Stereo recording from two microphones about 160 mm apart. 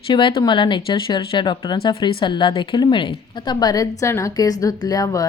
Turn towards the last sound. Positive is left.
turn(degrees=20)  # may be behind; listen again after turning